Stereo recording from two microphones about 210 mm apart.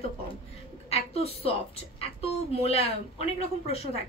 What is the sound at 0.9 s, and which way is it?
Speech, 30° left (ahead or behind).